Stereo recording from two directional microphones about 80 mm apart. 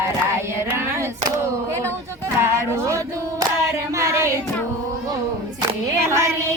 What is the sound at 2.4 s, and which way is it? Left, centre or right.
Speech, right.